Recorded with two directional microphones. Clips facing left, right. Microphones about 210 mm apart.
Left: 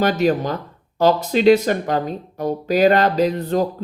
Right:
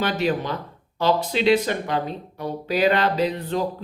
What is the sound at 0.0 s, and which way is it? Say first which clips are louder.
Speech: left 5 dB; 45° left (ahead or behind).